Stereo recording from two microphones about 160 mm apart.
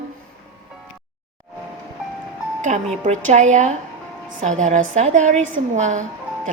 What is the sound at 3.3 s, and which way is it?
A woman's voice, 50° right (ahead or behind).